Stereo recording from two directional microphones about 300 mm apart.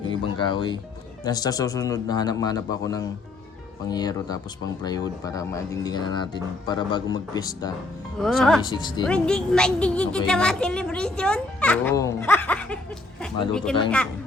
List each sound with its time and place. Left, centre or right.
0.0 s speech: centre
8.2 s a woman's voice: centre